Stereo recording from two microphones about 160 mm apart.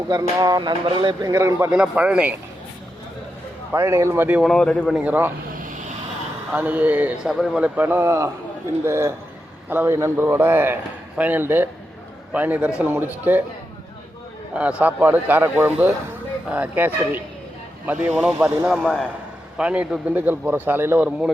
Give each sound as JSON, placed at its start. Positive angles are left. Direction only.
{"t": 0.1, "sound": "speech", "side_deg": -25}
{"t": 1.3, "sound": "a man's voice", "side_deg": -20}
{"t": 3.7, "sound": "a man's voice", "side_deg": -15}
{"t": 4.4, "sound": "speech", "side_deg": 5}
{"t": 4.9, "sound": "a man's voice", "side_deg": -10}
{"t": 6.5, "sound": "a man's voice", "side_deg": -10}
{"t": 14.5, "sound": "a man's voice", "side_deg": -10}
{"t": 19.5, "sound": "a man's voice", "side_deg": -5}